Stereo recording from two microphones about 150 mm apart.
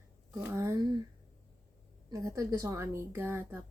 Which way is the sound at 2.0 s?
20° right (ahead or behind).